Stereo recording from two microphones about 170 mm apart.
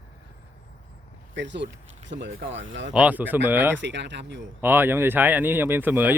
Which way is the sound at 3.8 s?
90° right.